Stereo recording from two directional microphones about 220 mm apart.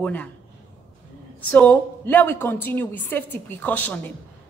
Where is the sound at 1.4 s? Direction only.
5° left (ahead or behind).